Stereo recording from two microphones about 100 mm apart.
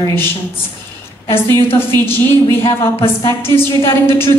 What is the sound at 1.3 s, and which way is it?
A woman's voice, 25° left (ahead or behind).